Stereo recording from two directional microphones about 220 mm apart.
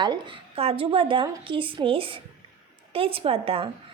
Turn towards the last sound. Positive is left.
turn(degrees=-25)  # may be behind; listen again after turning